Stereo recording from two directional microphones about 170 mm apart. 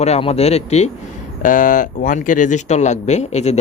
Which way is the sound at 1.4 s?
50° left (ahead or behind).